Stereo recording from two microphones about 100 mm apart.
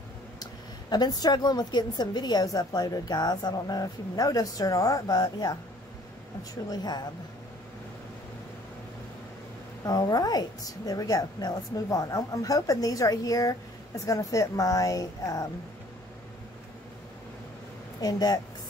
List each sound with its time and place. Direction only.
0.4 s a woman's voice: 45° left (ahead or behind)
6.7 s a woman's voice: 40° left (ahead or behind)
9.8 s a woman's voice: 40° left (ahead or behind)
18.0 s a woman's voice: 40° left (ahead or behind)